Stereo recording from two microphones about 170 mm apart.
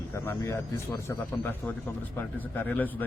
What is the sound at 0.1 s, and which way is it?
Speech, 15° left (ahead or behind).